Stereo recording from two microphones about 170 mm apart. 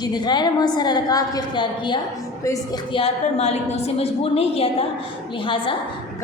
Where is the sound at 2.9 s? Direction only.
35° left (ahead or behind).